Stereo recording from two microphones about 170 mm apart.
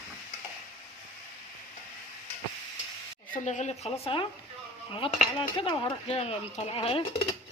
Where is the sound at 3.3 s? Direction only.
45° left (ahead or behind).